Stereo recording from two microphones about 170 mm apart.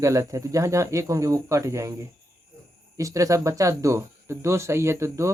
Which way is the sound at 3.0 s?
20° right (ahead or behind).